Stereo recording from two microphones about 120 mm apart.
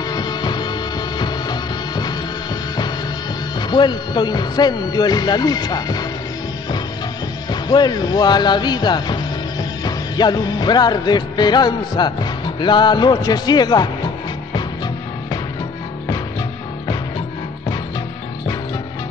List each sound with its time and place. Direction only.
0.1 s music: 35° left (ahead or behind)
3.5 s music: 40° left (ahead or behind)
7.6 s speech: 35° left (ahead or behind)